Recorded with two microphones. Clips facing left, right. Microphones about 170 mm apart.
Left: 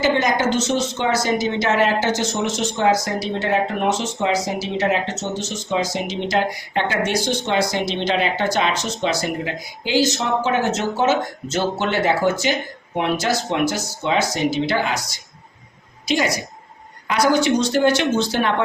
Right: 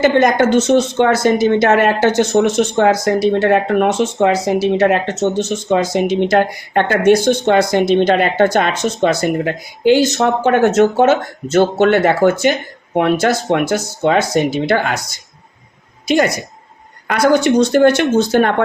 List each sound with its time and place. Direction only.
0.0 s a woman's voice: 55° right (ahead or behind)